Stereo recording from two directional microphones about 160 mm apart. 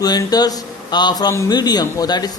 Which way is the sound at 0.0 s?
25° left (ahead or behind).